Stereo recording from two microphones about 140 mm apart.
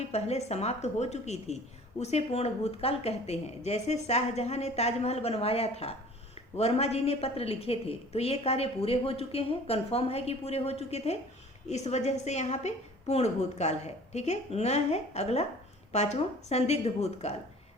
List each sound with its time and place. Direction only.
0.0 s a woman's voice: 50° left (ahead or behind)